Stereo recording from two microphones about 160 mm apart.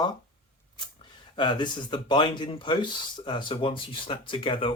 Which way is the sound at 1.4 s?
30° left (ahead or behind).